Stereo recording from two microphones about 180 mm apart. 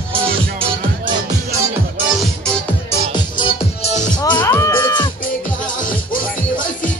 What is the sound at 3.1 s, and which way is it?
Music, 25° left (ahead or behind).